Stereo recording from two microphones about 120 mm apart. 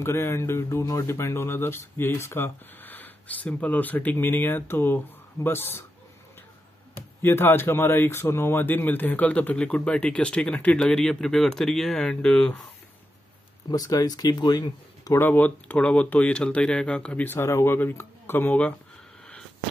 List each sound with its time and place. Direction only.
0.0 s speech: 20° left (ahead or behind)
7.2 s speech: 20° left (ahead or behind)
13.7 s speech: 30° left (ahead or behind)
15.1 s speech: 15° left (ahead or behind)